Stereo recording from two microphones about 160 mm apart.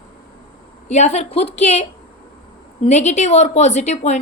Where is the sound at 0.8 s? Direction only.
45° left (ahead or behind).